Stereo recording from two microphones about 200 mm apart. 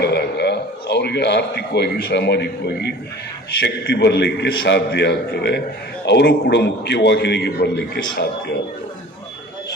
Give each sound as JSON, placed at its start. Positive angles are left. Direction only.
{"t": 0.0, "sound": "a man's voice", "side_deg": 55}